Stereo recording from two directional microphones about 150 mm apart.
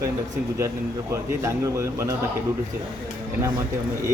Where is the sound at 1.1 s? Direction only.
20° right (ahead or behind).